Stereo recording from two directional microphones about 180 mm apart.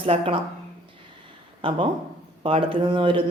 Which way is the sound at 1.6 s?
30° right (ahead or behind).